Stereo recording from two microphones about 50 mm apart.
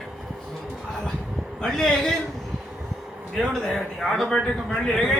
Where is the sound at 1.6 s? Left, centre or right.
Centre.